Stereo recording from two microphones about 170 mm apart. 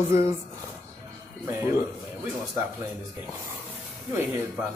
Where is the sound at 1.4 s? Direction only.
15° right (ahead or behind).